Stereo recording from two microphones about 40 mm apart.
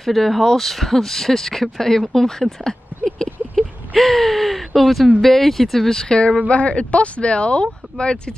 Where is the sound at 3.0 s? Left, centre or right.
Centre.